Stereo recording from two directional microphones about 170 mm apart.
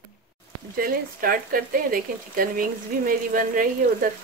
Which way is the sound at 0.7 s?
55° right (ahead or behind).